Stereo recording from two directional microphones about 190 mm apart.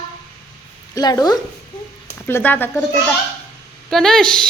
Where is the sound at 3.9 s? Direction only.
Centre (ahead or behind).